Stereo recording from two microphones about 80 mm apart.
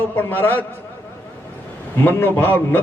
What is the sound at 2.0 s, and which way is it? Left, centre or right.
Speech, left.